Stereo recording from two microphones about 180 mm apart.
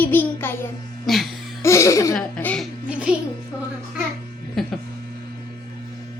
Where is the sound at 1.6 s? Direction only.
15° left (ahead or behind).